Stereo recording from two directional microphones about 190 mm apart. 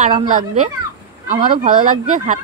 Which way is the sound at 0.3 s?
45° right (ahead or behind).